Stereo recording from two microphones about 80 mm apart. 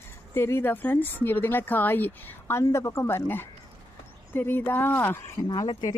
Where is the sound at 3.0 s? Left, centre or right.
Left.